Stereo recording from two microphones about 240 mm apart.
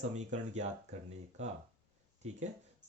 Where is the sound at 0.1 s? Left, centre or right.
Right.